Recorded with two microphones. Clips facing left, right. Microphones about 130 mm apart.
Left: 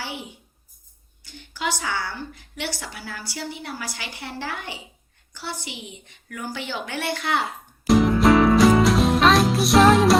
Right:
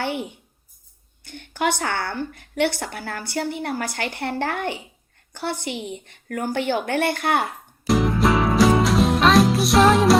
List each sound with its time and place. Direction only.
0.0 s a woman's voice: 55° right (ahead or behind)
7.9 s music: centre (ahead or behind)